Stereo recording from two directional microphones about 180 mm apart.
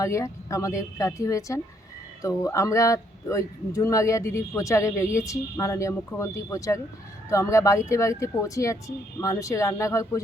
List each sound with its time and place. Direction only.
0.0 s speech: 15° left (ahead or behind)